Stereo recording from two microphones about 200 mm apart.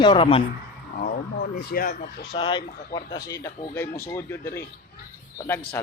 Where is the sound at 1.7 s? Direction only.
45° left (ahead or behind).